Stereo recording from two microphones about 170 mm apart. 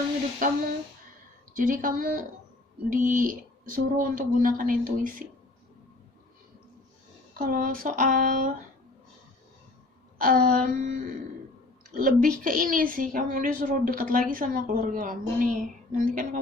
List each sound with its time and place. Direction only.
0.4 s speech: 50° right (ahead or behind)
7.3 s speech: 55° right (ahead or behind)
10.2 s a woman's voice: 55° right (ahead or behind)